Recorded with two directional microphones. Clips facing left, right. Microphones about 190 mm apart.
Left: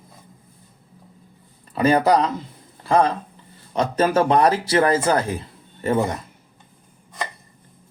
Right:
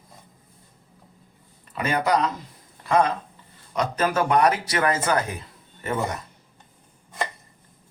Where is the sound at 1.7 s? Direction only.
35° left (ahead or behind).